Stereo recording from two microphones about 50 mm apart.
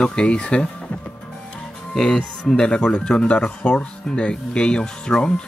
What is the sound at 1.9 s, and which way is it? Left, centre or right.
Speech, centre.